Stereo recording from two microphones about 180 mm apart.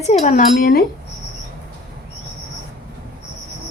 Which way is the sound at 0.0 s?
40° left (ahead or behind).